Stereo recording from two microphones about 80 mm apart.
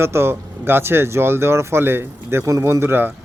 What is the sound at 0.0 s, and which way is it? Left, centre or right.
Speech, right.